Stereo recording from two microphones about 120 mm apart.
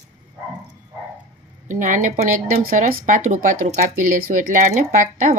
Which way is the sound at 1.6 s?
90° right.